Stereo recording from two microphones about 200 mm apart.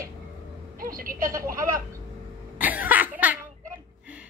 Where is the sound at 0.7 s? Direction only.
45° right (ahead or behind).